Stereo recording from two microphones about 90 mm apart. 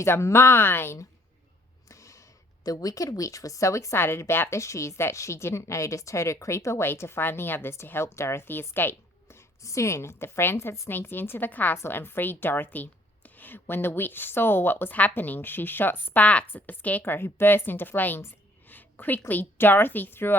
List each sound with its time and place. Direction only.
0.0 s a woman's voice: 30° left (ahead or behind)
1.9 s a sound: 35° left (ahead or behind)
2.6 s speech: 40° left (ahead or behind); by 9.4 s 25° left (ahead or behind)
9.6 s a woman's voice: 35° left (ahead or behind)
18.7 s a sound: 20° left (ahead or behind)
19.3 s a woman's voice: 20° left (ahead or behind)